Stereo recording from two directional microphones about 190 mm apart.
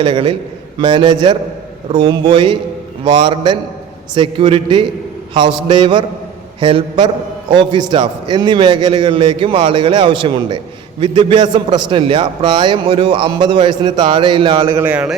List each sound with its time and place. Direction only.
0.0 s a man's voice: 30° right (ahead or behind); by 15.1 s 10° right (ahead or behind)